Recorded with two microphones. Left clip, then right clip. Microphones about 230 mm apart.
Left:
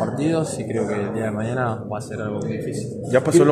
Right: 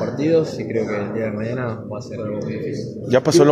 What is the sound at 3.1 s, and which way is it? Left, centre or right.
Speech, right.